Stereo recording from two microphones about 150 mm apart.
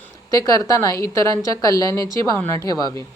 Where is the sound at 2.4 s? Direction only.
20° left (ahead or behind).